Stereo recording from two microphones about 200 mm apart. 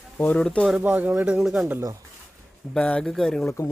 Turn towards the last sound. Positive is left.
turn(degrees=5)  # may be behind; listen again after turning